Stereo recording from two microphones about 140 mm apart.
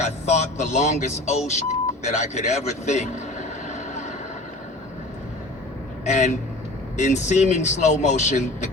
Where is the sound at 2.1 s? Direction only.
55° left (ahead or behind).